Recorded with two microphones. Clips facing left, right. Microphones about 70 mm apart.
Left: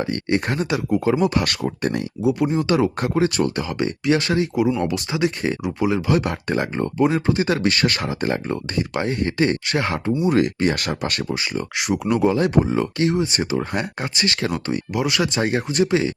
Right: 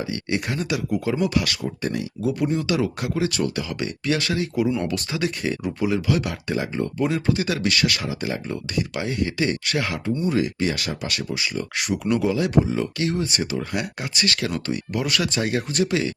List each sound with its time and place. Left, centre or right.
0.3 s speech: left
1.5 s speech: left
2.2 s speech: left
2.6 s speech: left
7.0 s speech: left
10.2 s speech: left